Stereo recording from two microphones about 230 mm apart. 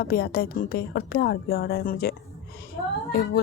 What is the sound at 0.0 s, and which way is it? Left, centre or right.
A woman's voice, left.